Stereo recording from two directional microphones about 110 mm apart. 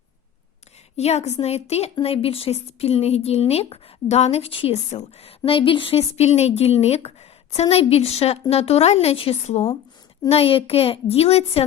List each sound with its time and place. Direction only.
0.9 s a woman's voice: 80° left
5.5 s a woman's voice: 55° left (ahead or behind); by 9.6 s 75° left (ahead or behind)
10.2 s a child's voice: 60° left (ahead or behind)